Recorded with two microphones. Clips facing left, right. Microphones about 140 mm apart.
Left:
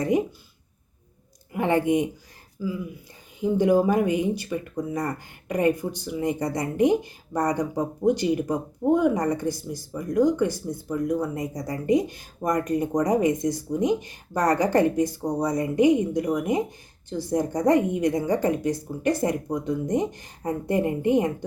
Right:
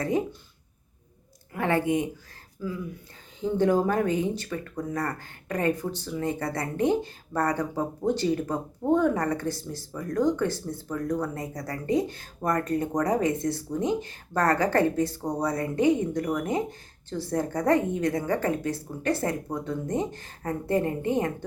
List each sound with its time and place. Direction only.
1.5 s speech: 20° left (ahead or behind)
2.6 s speech: 10° left (ahead or behind)